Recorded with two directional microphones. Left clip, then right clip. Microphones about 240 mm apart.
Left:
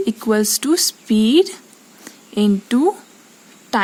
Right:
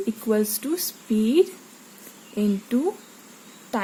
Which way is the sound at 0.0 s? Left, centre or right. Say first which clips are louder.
Left 6 dB; left.